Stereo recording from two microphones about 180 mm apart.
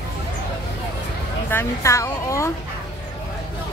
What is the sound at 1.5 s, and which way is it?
A woman's voice, 15° left (ahead or behind).